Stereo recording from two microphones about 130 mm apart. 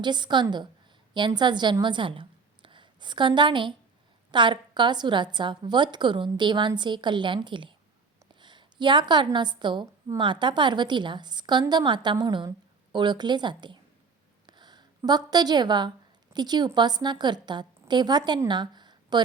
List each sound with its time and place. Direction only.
0.0 s a woman's voice: 35° right (ahead or behind)
14.4 s a sound: 35° right (ahead or behind)
16.3 s a woman's voice: 35° right (ahead or behind)